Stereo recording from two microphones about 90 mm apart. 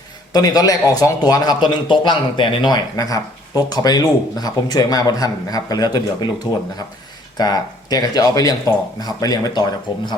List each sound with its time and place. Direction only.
0.3 s a man's voice: 45° left (ahead or behind)